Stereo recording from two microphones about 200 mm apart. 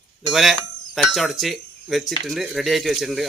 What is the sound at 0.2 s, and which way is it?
Speech, centre (ahead or behind).